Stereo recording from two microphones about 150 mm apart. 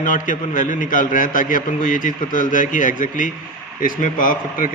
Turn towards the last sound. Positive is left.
turn(degrees=65)  # may be behind; listen again after turning